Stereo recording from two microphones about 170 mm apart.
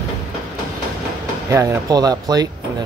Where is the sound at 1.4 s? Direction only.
20° right (ahead or behind).